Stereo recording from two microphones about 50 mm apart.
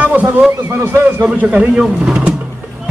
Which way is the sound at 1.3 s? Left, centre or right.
Centre.